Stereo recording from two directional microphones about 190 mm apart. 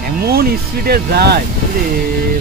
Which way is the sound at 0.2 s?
55° right (ahead or behind).